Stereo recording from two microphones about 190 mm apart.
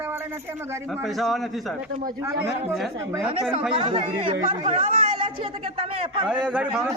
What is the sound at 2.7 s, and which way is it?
Speech, centre (ahead or behind).